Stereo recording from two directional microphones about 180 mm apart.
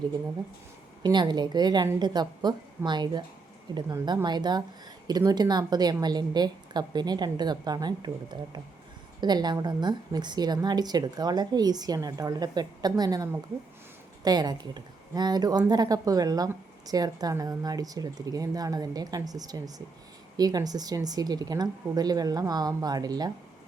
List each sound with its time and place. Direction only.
1.0 s a woman's voice: 25° right (ahead or behind)